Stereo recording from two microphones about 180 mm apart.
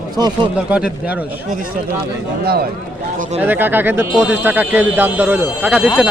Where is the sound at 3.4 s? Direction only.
10° right (ahead or behind).